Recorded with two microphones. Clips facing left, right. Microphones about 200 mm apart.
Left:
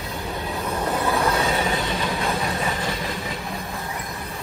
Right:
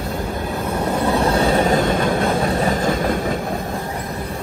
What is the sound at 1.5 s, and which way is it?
Train, 45° right (ahead or behind).